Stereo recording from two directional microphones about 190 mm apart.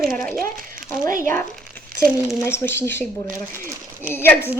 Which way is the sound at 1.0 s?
45° right (ahead or behind).